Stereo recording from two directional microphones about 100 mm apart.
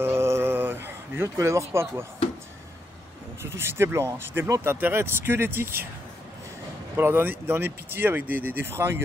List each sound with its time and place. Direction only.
0.0 s a sound: 25° right (ahead or behind)
1.3 s speech: 30° right (ahead or behind)
3.4 s speech: 25° right (ahead or behind)
7.0 s speech: 20° right (ahead or behind)